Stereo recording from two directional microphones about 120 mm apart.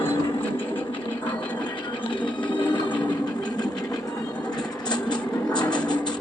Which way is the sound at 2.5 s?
40° left (ahead or behind).